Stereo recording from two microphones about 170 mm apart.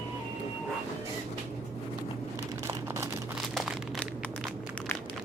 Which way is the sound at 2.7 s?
15° right (ahead or behind).